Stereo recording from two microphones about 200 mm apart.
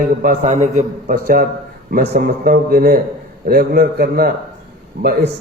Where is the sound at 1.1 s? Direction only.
50° right (ahead or behind).